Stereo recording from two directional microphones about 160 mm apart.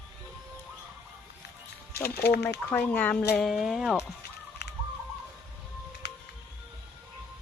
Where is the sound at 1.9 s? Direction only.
75° left (ahead or behind).